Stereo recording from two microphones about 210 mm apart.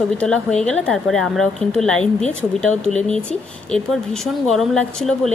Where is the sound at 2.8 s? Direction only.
35° left (ahead or behind).